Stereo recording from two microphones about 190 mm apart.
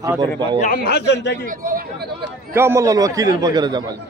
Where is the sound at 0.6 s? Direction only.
50° left (ahead or behind).